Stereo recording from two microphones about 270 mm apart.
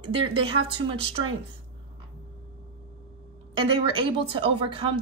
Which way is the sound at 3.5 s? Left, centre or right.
Centre.